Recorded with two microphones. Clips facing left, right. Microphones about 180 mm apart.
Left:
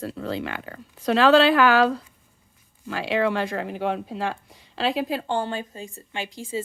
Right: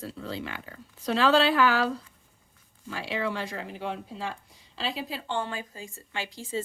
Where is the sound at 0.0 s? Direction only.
65° left (ahead or behind).